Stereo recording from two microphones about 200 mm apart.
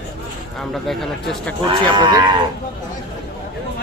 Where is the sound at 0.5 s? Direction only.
Centre (ahead or behind).